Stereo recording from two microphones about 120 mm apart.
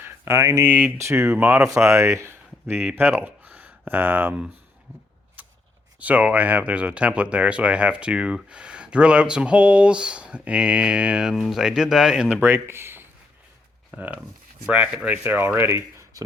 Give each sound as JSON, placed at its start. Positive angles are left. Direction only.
{"t": 0.0, "sound": "speech", "side_deg": -20}
{"t": 5.4, "sound": "a sound", "side_deg": -15}
{"t": 6.0, "sound": "speech", "side_deg": -10}
{"t": 12.4, "sound": "speech", "side_deg": -20}